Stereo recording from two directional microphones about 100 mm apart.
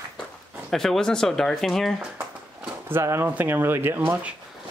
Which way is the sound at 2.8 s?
25° right (ahead or behind).